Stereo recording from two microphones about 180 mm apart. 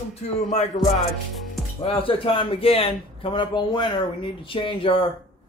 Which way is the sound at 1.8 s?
30° left (ahead or behind).